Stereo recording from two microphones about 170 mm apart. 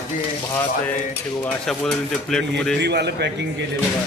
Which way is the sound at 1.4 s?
5° left (ahead or behind).